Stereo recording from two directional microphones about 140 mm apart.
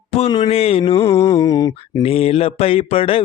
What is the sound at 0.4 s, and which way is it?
Mantra, 45° left (ahead or behind).